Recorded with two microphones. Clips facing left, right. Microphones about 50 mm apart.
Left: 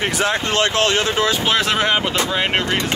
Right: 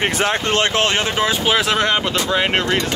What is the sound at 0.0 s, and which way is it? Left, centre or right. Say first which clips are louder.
Speech: right 1 dB; right.